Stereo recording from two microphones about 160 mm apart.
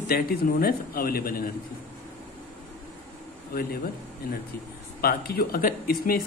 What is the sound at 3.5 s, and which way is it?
Speech, 70° left (ahead or behind).